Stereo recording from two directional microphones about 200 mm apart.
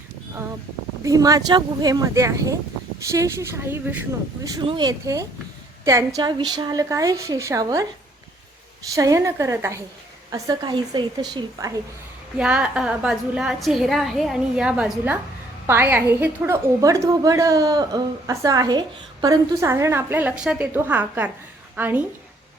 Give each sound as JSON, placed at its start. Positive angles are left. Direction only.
{"t": 1.0, "sound": "a woman's voice", "side_deg": -20}
{"t": 4.4, "sound": "a woman's voice", "side_deg": -20}
{"t": 9.0, "sound": "a woman's voice", "side_deg": -15}
{"t": 12.4, "sound": "a woman's voice", "side_deg": -5}